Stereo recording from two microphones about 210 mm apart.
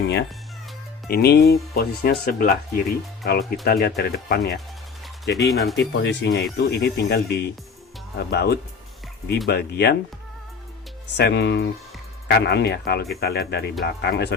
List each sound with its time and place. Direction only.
1.0 s speech: 50° left (ahead or behind)
5.3 s speech: centre (ahead or behind)
5.7 s speech: 60° left (ahead or behind)
11.2 s speech: 50° left (ahead or behind)